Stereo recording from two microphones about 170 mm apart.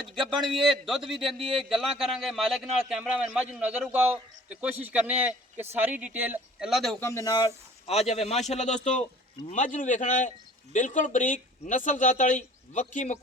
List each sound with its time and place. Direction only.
0.2 s a man's voice: centre (ahead or behind)
4.8 s speech: 10° right (ahead or behind)
7.0 s speech: 15° left (ahead or behind)
7.9 s speech: 40° left (ahead or behind)